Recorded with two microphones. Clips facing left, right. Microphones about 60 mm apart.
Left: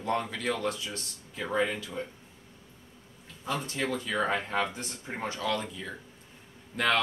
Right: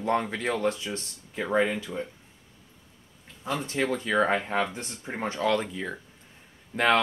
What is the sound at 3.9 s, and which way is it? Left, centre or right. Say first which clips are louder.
Speech: right 5 dB; right.